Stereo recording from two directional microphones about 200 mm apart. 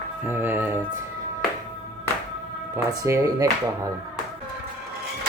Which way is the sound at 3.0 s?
15° right (ahead or behind).